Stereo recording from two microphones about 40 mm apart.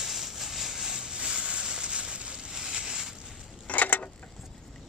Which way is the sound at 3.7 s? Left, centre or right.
Left.